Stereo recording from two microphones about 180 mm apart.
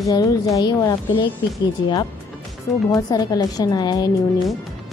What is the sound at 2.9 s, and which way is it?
A woman's voice, 20° left (ahead or behind).